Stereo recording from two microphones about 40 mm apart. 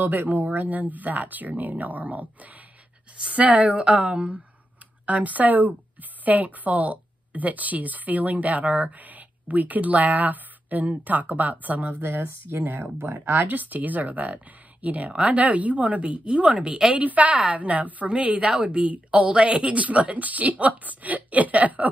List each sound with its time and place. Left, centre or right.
0.0 s a woman's voice: right
5.0 s speech: right
12.0 s speech: right
18.1 s a woman's voice: right